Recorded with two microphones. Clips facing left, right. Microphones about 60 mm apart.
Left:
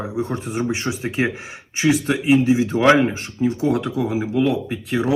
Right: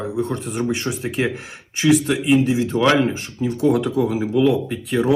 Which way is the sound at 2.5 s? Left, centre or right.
Left.